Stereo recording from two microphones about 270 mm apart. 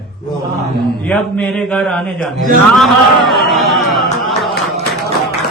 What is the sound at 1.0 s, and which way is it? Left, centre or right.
Mantra, centre.